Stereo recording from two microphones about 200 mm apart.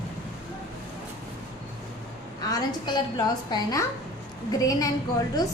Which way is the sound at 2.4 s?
20° left (ahead or behind).